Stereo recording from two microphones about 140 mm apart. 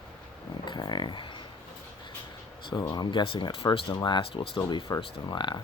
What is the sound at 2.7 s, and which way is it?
Speech, 30° left (ahead or behind).